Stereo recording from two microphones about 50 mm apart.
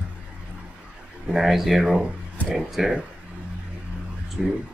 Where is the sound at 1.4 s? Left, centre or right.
Centre.